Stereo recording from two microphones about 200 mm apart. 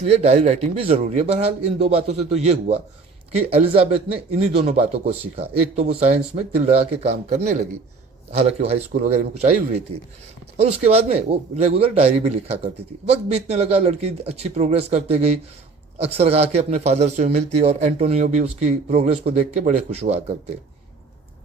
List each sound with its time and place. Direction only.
0.1 s a man's voice: 30° right (ahead or behind)